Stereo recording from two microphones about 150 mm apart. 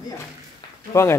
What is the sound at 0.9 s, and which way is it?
Speech, 20° left (ahead or behind).